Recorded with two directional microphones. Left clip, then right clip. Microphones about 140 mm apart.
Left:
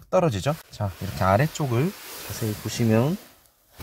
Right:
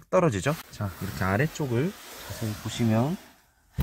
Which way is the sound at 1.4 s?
65° left (ahead or behind).